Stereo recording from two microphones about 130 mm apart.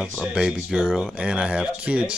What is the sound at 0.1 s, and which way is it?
Speech, 5° right (ahead or behind).